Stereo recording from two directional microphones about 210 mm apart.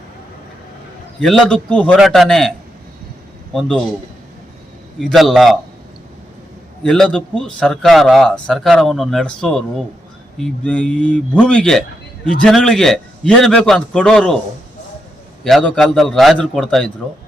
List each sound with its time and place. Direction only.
1.2 s a man's voice: centre (ahead or behind)
3.5 s a man's voice: centre (ahead or behind)
4.9 s a man's voice: centre (ahead or behind)
6.8 s a man's voice: 5° left (ahead or behind)
15.4 s a man's voice: 5° left (ahead or behind)